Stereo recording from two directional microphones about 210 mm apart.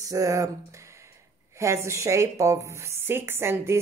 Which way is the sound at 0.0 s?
15° right (ahead or behind).